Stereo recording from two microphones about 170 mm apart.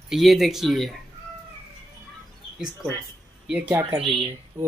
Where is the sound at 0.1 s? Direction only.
Centre (ahead or behind).